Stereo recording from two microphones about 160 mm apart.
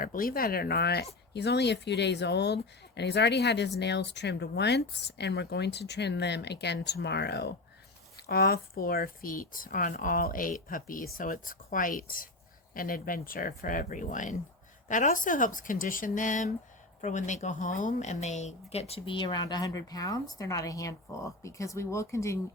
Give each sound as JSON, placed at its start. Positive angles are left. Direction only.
{"t": 0.0, "sound": "speech", "side_deg": 60}
{"t": 8.1, "sound": "speech", "side_deg": 75}